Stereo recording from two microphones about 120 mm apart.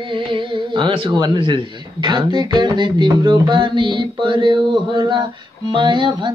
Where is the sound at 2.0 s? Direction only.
40° right (ahead or behind).